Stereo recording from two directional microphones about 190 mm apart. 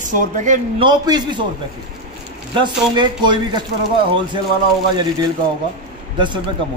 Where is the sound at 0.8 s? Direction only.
20° right (ahead or behind).